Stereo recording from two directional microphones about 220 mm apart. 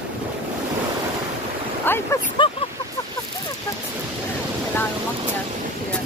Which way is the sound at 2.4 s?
20° left (ahead or behind).